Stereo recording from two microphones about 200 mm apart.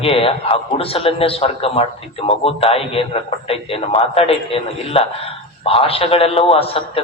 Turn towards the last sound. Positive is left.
turn(degrees=30)  # may be behind; listen again after turning